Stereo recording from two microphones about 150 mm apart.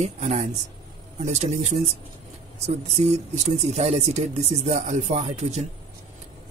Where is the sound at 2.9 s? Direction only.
45° right (ahead or behind).